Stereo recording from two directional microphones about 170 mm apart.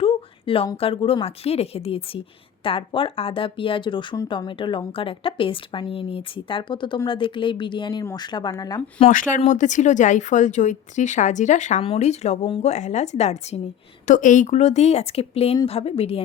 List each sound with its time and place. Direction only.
0.0 s a sound: 30° left (ahead or behind)
0.8 s speech: 35° left (ahead or behind)
9.0 s speech: 50° left (ahead or behind)